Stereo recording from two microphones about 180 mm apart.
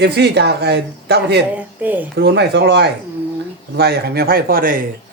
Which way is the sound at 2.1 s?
70° right (ahead or behind).